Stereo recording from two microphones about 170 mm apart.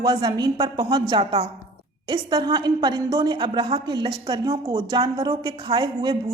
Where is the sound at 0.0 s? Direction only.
25° right (ahead or behind).